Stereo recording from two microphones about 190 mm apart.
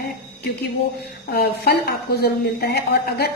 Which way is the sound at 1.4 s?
60° left (ahead or behind).